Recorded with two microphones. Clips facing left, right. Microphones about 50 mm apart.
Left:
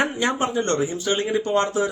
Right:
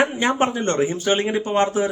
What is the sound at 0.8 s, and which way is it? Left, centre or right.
Speech, right.